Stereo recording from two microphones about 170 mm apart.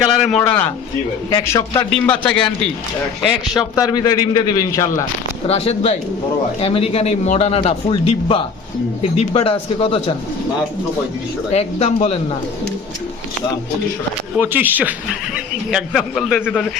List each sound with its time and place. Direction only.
0.3 s a man's voice: 5° left (ahead or behind)
1.3 s a man's voice: 25° left (ahead or behind)
2.0 s a man's voice: 5° left (ahead or behind)
3.8 s a man's voice: 25° left (ahead or behind)
5.5 s a man's voice: 35° left (ahead or behind)
11.5 s a man's voice: 40° left (ahead or behind)
14.3 s speech: 10° right (ahead or behind)
15.7 s a man's voice: centre (ahead or behind)